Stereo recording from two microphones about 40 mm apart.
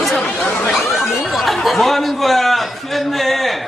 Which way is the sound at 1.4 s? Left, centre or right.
Centre.